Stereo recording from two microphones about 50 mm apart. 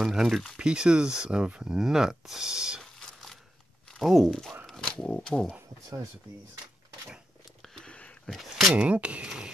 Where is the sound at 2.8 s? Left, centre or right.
Centre.